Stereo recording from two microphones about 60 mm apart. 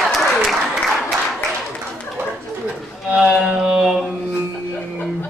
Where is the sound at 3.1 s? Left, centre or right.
Centre.